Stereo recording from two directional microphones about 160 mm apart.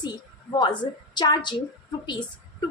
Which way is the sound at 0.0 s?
25° left (ahead or behind).